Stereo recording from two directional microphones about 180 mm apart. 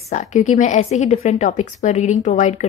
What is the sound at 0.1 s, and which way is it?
A woman's voice, 40° left (ahead or behind).